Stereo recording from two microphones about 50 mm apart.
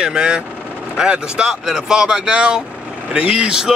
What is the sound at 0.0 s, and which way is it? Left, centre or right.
Speech, centre.